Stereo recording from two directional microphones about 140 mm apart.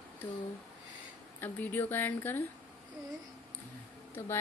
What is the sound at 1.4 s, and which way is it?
Speech, 15° left (ahead or behind).